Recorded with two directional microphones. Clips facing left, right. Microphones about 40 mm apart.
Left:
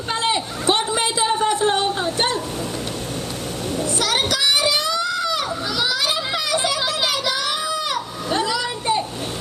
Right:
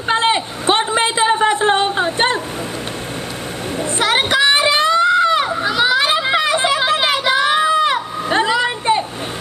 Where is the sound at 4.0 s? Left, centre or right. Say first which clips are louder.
Right 8 dB; right.